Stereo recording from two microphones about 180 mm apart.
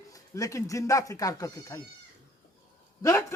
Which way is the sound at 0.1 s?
20° left (ahead or behind).